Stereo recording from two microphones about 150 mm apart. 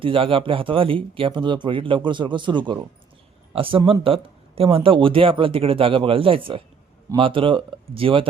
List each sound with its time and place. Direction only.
0.0 s speech: 35° right (ahead or behind)